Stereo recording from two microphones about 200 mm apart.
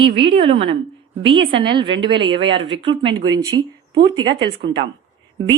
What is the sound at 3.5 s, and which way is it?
Speech, 60° right (ahead or behind).